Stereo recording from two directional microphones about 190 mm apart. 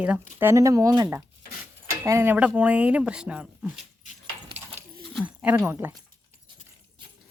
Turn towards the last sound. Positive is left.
turn(degrees=-15)  # may be behind; listen again after turning